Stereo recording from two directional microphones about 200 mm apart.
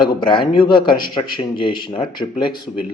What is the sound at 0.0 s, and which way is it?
A man's voice, 25° left (ahead or behind).